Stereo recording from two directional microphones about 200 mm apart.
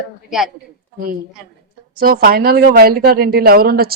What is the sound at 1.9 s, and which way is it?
Speech, 45° right (ahead or behind).